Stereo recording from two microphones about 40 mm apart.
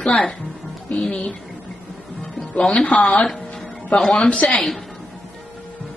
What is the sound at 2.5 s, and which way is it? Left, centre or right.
Speech, left.